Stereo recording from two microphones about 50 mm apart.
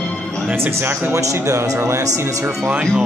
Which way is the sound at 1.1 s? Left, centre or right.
Right.